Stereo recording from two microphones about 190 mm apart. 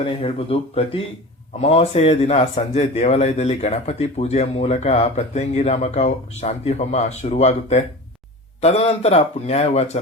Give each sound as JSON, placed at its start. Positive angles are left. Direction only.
{"t": 0.0, "sound": "speech", "side_deg": 30}